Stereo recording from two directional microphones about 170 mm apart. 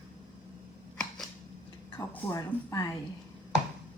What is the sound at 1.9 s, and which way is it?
Speech, 15° left (ahead or behind).